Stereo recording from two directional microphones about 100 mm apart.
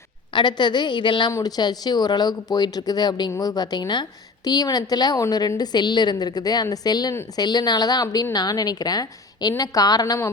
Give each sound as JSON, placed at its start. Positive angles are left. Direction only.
{"t": 0.3, "sound": "a woman's voice", "side_deg": 50}
{"t": 1.3, "sound": "a woman's voice", "side_deg": 35}